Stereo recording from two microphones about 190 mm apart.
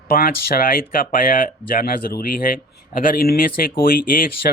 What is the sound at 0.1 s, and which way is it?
Speech, 50° left (ahead or behind).